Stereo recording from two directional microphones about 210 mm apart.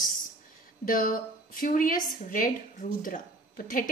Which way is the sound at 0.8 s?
45° left (ahead or behind).